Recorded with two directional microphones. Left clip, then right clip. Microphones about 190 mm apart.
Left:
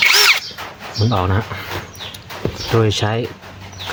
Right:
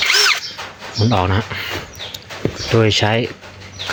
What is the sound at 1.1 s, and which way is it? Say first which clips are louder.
Speech: right 2 dB; 5° right (ahead or behind).